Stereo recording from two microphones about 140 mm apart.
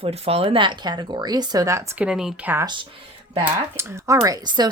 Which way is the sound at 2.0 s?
5° right (ahead or behind).